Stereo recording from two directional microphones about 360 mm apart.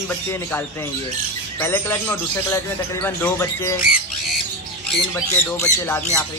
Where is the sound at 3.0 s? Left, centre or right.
Centre.